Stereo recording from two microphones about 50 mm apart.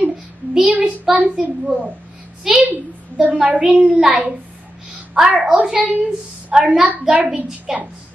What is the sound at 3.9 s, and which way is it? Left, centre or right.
A child's voice, centre.